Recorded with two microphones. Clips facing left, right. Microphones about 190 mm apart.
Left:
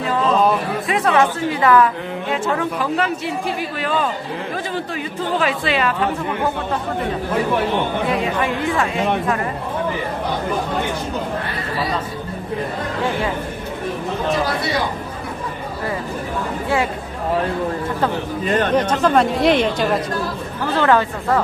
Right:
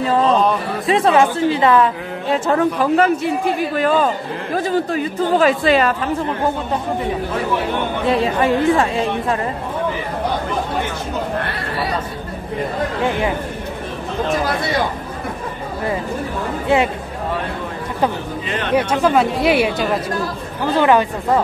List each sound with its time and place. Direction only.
0.8 s a woman's voice: 30° right (ahead or behind)
2.3 s a woman's voice: 40° right (ahead or behind)
8.1 s a woman's voice: 35° right (ahead or behind)
16.6 s speech: 20° right (ahead or behind)
18.5 s speech: 45° left (ahead or behind)
18.8 s speech: 10° right (ahead or behind)
20.7 s speech: 15° right (ahead or behind)